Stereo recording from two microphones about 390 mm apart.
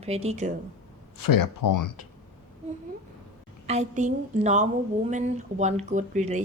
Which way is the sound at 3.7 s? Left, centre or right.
Centre.